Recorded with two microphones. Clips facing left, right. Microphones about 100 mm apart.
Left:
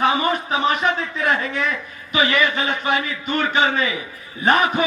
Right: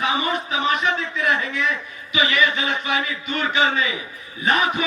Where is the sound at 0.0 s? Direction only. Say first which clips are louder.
Left 4 dB; 40° left (ahead or behind).